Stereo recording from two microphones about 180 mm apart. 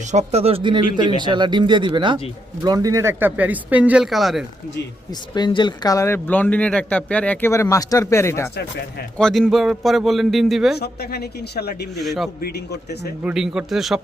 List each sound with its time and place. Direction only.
0.1 s speech: 35° right (ahead or behind); by 4.4 s centre (ahead or behind)
5.3 s speech: 25° left (ahead or behind)
9.1 s a man's voice: 5° left (ahead or behind)
10.8 s speech: 60° left (ahead or behind)
12.0 s a man's voice: centre (ahead or behind)
12.4 s speech: 65° left (ahead or behind)
13.2 s a man's voice: 5° right (ahead or behind)